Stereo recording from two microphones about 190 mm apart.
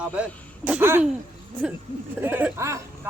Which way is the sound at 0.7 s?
10° right (ahead or behind).